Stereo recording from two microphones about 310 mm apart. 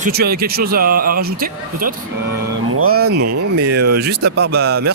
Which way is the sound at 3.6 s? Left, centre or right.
Right.